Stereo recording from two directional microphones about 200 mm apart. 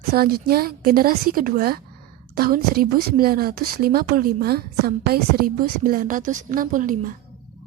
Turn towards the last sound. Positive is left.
turn(degrees=-40)  # may be behind; listen again after turning